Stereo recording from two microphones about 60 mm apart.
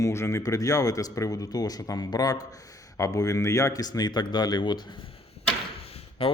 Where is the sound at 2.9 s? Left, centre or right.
Left.